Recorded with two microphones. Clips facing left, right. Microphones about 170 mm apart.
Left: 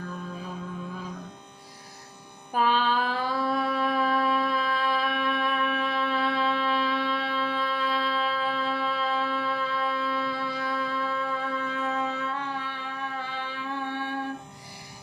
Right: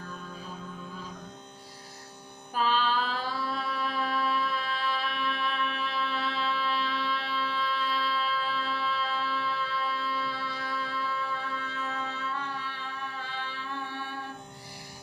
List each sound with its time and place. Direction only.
2.5 s music: 55° left (ahead or behind)